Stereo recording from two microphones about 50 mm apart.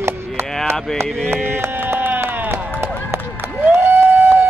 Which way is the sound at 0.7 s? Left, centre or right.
Right.